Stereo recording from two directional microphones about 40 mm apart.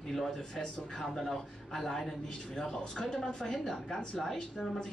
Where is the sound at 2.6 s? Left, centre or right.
Centre.